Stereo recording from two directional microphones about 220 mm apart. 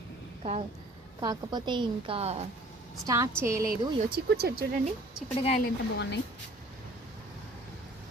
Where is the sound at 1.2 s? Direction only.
20° right (ahead or behind).